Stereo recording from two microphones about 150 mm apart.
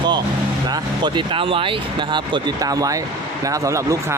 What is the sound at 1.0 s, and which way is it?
Speech, 35° right (ahead or behind).